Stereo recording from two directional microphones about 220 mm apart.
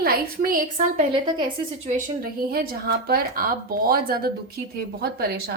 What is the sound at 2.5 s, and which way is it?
A woman's voice, 45° right (ahead or behind).